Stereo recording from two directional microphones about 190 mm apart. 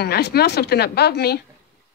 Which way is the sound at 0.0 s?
55° left (ahead or behind).